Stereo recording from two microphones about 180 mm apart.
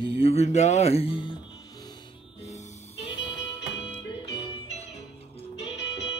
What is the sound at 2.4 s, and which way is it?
Music, 35° left (ahead or behind).